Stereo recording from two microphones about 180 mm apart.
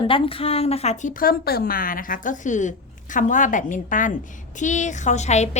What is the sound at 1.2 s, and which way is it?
A woman's voice, 55° left (ahead or behind).